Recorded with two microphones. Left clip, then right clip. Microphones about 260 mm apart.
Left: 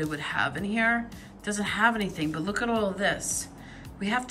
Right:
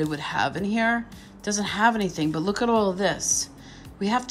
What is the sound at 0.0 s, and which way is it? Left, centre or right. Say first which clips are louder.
Speech: right 3 dB; centre.